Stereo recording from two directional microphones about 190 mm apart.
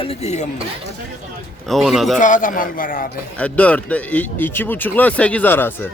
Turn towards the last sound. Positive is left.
turn(degrees=10)  # may be behind; listen again after turning